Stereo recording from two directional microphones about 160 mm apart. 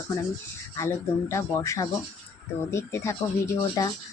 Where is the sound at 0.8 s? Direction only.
20° left (ahead or behind).